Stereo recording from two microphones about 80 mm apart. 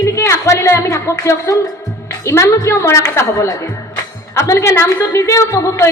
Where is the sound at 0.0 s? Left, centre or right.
Left.